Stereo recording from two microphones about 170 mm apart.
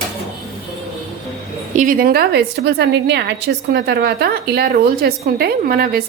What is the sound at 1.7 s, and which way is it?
A woman's voice, 50° right (ahead or behind).